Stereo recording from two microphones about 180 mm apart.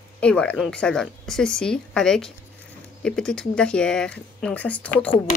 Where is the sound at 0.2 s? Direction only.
5° left (ahead or behind).